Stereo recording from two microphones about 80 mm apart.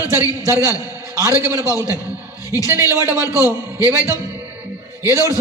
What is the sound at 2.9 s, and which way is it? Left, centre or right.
Speech, right.